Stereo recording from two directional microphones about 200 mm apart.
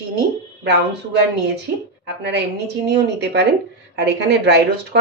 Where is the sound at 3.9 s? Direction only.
55° right (ahead or behind).